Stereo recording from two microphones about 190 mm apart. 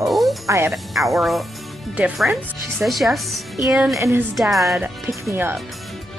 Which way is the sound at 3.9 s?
15° right (ahead or behind).